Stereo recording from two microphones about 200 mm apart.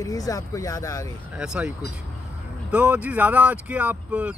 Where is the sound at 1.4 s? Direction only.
5° right (ahead or behind).